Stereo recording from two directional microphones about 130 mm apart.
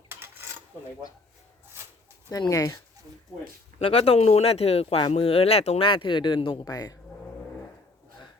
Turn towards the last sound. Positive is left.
turn(degrees=30)  # may be behind; listen again after turning